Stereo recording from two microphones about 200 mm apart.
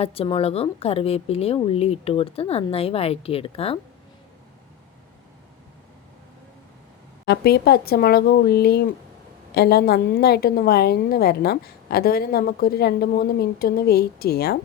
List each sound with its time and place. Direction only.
0.0 s a woman's voice: 30° left (ahead or behind)
7.3 s a woman's voice: 55° left (ahead or behind)